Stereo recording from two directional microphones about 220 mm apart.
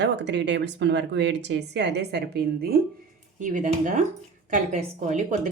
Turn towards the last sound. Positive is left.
turn(degrees=-35)  # may be behind; listen again after turning